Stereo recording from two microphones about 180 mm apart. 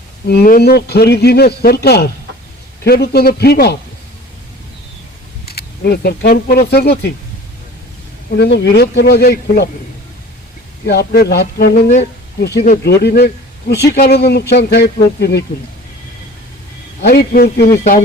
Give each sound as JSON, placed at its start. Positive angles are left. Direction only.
{"t": 0.3, "sound": "a man's voice", "side_deg": 60}
{"t": 5.5, "sound": "speech", "side_deg": 60}
{"t": 8.4, "sound": "a man's voice", "side_deg": 70}
{"t": 10.8, "sound": "a man's voice", "side_deg": 60}
{"t": 17.0, "sound": "a man's voice", "side_deg": 60}